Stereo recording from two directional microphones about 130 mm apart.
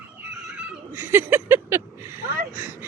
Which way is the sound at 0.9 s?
15° right (ahead or behind).